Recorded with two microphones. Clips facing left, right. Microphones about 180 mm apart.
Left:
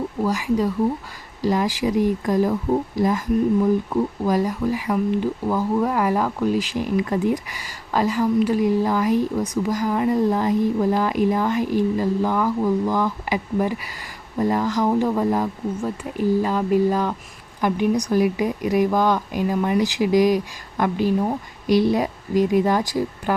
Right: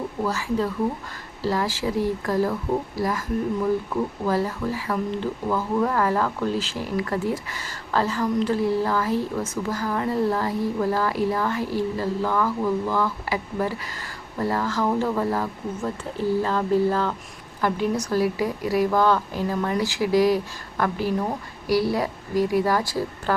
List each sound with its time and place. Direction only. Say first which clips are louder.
0.3 s speech: left 4 dB; 15° left (ahead or behind)